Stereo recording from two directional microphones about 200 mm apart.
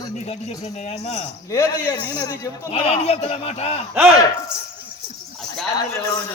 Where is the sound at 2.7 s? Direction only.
30° left (ahead or behind).